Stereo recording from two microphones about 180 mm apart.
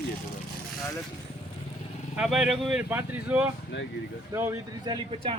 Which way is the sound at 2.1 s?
5° right (ahead or behind).